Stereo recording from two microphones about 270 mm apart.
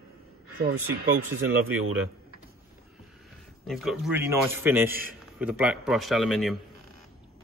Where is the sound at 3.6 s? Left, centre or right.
Centre.